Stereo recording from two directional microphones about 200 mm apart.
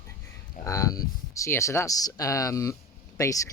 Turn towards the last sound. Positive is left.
turn(degrees=15)  # may be behind; listen again after turning